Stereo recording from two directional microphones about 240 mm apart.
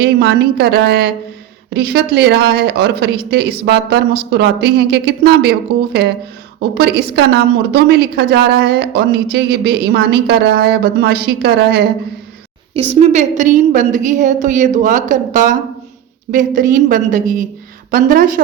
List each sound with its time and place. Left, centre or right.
0.0 s a woman's voice: right
12.9 s a woman's voice: right